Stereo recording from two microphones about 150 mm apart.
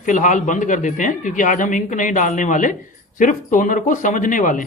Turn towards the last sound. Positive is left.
turn(degrees=60)  # may be behind; listen again after turning